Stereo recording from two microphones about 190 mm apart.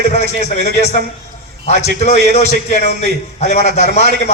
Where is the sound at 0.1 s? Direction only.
35° left (ahead or behind).